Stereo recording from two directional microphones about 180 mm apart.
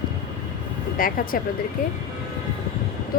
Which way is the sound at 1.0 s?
50° left (ahead or behind).